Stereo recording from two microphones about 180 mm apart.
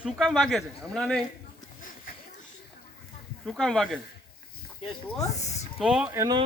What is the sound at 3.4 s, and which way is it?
Speech, centre (ahead or behind).